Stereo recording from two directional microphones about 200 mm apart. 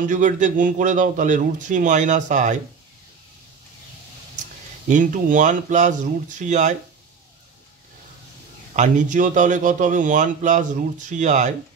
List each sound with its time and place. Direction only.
0.0 s a man's voice: 40° right (ahead or behind)
4.8 s a man's voice: 40° right (ahead or behind)
8.7 s a man's voice: 35° right (ahead or behind)